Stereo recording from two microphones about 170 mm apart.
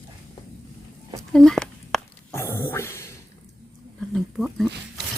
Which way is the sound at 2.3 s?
15° left (ahead or behind).